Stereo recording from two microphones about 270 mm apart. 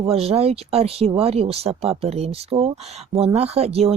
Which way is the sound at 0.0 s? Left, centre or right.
Right.